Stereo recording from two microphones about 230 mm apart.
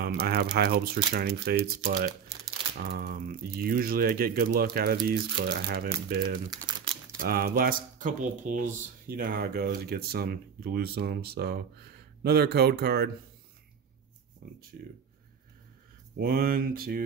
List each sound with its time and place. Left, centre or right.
0.0 s speech: right
6.5 s crumpling: centre
7.2 s speech: right
14.7 s speech: right
16.2 s speech: right